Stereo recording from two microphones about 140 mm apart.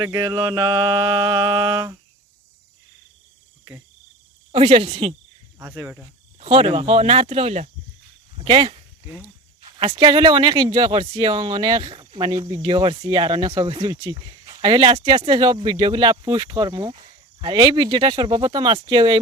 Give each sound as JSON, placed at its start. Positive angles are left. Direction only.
{"t": 0.0, "sound": "mantra", "side_deg": -25}
{"t": 4.5, "sound": "speech", "side_deg": -40}
{"t": 5.5, "sound": "speech", "side_deg": -15}
{"t": 6.4, "sound": "speech", "side_deg": -40}
{"t": 9.6, "sound": "a sound", "side_deg": -30}
{"t": 10.0, "sound": "speech", "side_deg": -30}